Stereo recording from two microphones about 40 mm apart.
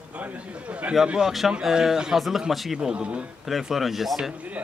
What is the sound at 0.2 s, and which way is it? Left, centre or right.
Speech, right.